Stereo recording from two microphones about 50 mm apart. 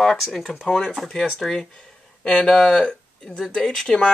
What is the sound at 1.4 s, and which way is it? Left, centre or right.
Speech, centre.